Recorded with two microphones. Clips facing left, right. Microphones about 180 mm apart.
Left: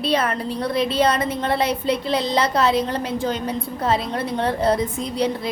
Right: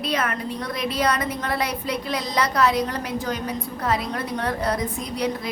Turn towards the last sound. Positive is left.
turn(degrees=30)  # may be behind; listen again after turning